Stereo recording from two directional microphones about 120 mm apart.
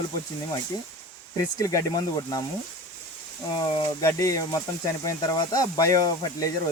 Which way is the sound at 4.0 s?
25° left (ahead or behind).